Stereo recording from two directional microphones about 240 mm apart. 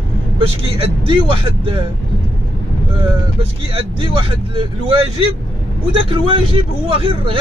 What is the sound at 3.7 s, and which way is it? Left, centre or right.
Speech, right.